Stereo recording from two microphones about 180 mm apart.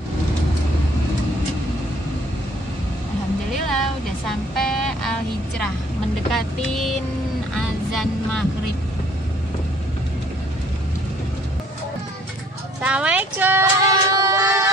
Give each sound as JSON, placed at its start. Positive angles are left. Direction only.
{"t": 4.3, "sound": "music", "side_deg": 0}
{"t": 6.3, "sound": "vehicle", "side_deg": 0}
{"t": 12.8, "sound": "a sound", "side_deg": -5}